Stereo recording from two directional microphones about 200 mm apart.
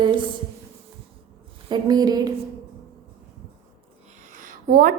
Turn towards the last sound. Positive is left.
turn(degrees=-45)  # may be behind; listen again after turning